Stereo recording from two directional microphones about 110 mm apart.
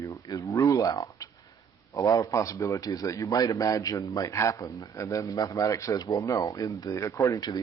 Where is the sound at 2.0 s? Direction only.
30° left (ahead or behind).